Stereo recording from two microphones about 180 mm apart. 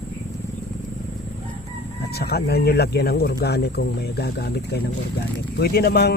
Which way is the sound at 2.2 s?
60° left (ahead or behind).